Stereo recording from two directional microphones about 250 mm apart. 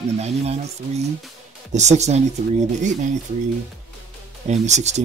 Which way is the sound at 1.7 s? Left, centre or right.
Right.